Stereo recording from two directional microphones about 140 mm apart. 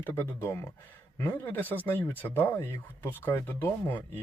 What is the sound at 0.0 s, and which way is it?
Speech, 15° left (ahead or behind).